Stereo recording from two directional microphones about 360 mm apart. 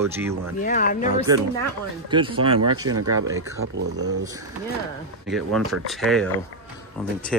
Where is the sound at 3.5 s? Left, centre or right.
Right.